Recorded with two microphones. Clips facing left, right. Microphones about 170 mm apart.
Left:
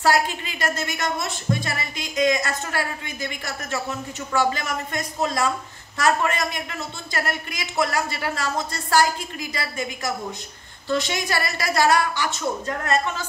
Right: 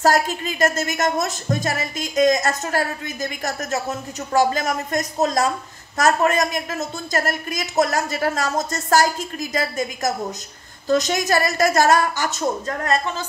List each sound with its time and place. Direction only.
0.0 s speech: 45° right (ahead or behind)